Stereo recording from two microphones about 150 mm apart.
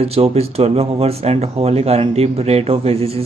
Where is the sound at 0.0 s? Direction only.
45° right (ahead or behind).